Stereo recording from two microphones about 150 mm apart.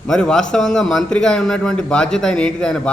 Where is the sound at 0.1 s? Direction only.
5° left (ahead or behind).